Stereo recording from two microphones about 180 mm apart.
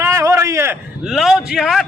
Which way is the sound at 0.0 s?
15° right (ahead or behind).